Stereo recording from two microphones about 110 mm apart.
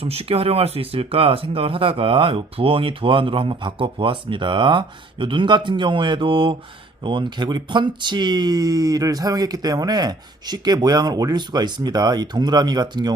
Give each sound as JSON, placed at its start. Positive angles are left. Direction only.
{"t": 0.0, "sound": "speech", "side_deg": -60}